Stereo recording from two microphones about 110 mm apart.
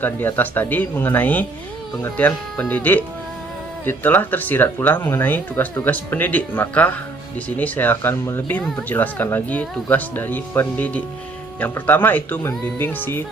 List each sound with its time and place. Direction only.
0.0 s speech: 20° left (ahead or behind)